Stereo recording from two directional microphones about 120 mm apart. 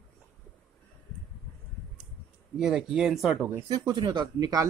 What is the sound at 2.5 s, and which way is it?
Speech, 5° right (ahead or behind).